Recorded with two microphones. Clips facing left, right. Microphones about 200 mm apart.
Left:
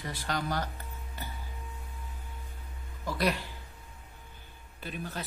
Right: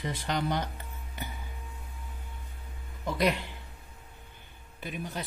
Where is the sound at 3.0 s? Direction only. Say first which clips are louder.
Right 2 dB; 20° right (ahead or behind).